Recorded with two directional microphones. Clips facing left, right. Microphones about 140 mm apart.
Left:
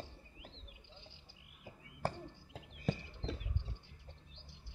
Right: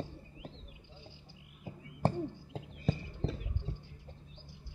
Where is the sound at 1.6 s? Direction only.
30° right (ahead or behind).